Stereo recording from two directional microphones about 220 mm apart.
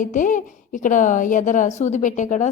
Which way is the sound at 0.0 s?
35° left (ahead or behind).